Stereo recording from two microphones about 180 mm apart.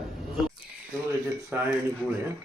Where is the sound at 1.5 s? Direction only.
10° right (ahead or behind).